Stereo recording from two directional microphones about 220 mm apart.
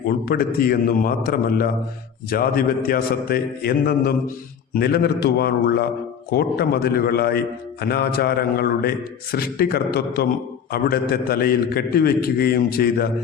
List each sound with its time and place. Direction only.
0.3 s a man's voice: 45° left (ahead or behind)